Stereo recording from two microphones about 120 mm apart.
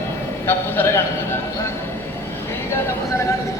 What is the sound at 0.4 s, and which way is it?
Speech, 20° left (ahead or behind).